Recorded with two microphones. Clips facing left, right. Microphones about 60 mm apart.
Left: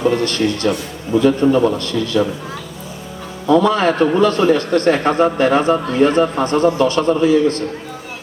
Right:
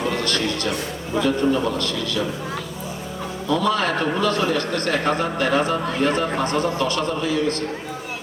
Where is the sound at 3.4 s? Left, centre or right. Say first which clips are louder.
Left 8 dB; left.